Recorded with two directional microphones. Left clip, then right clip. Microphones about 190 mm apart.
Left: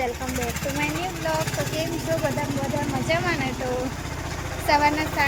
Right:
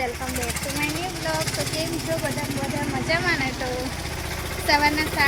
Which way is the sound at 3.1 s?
10° left (ahead or behind).